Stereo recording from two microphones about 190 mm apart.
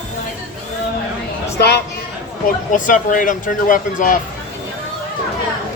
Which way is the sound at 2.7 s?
40° left (ahead or behind).